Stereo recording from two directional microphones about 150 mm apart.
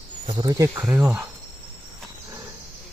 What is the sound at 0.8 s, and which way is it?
Speech, 10° right (ahead or behind).